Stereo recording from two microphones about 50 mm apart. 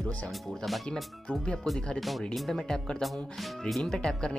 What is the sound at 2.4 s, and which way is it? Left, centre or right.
Speech, centre.